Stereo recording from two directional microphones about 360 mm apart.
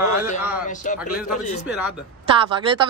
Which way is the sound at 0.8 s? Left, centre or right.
Left.